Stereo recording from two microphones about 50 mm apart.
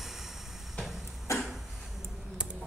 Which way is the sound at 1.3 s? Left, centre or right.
Left.